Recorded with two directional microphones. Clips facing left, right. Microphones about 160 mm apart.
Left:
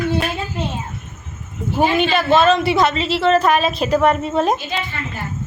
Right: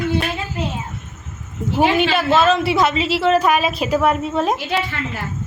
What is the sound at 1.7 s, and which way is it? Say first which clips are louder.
A woman's voice: even; 5° right (ahead or behind).